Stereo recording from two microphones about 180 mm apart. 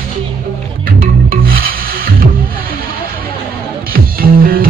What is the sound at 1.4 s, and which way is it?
Rub, 55° right (ahead or behind).